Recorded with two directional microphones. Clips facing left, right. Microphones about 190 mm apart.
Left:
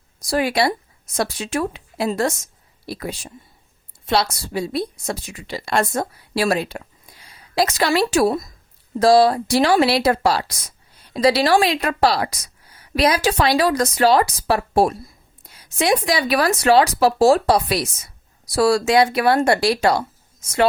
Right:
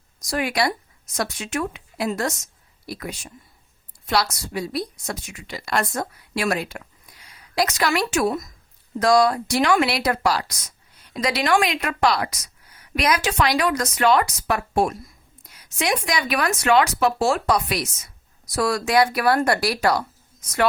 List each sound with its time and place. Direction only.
0.2 s a woman's voice: 30° left (ahead or behind)